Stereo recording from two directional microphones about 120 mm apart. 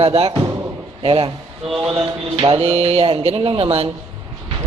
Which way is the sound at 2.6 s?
55° right (ahead or behind).